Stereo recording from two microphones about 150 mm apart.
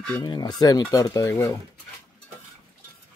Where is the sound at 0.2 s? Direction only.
30° left (ahead or behind).